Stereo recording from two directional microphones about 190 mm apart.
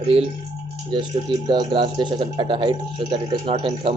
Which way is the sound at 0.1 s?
30° right (ahead or behind).